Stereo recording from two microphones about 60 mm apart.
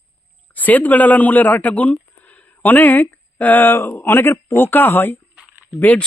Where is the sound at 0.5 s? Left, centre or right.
Left.